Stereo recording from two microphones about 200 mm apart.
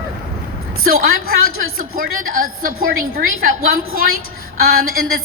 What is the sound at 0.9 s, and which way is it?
A woman's voice, 45° right (ahead or behind).